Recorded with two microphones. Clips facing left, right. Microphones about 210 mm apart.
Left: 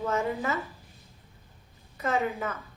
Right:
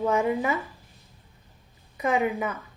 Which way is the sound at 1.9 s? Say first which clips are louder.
Right 4 dB; 15° right (ahead or behind).